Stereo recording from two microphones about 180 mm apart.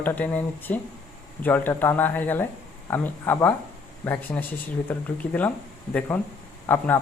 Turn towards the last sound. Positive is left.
turn(degrees=10)  # may be behind; listen again after turning